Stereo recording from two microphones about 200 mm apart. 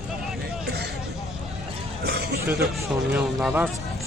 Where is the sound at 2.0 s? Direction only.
55° right (ahead or behind).